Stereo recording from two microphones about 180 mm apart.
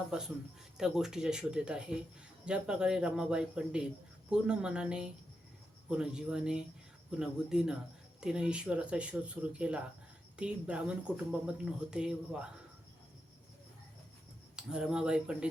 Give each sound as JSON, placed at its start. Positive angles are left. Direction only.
{"t": 0.1, "sound": "speech", "side_deg": -5}
{"t": 14.5, "sound": "speech", "side_deg": -5}